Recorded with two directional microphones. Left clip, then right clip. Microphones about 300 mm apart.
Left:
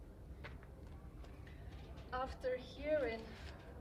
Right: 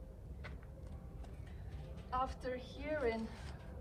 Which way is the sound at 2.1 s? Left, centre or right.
Centre.